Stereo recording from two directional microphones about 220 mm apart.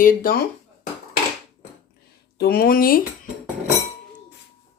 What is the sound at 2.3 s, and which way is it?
Speech, 45° left (ahead or behind).